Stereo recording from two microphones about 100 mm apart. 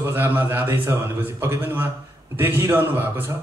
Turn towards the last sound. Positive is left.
turn(degrees=-20)  # may be behind; listen again after turning